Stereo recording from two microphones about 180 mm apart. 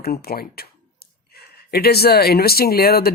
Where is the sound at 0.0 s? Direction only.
60° left (ahead or behind).